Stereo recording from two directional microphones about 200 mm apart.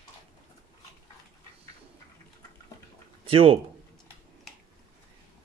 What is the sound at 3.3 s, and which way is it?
Speech, 30° right (ahead or behind).